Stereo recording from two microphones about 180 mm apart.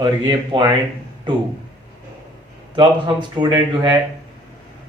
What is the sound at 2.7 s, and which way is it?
Speech, 25° right (ahead or behind).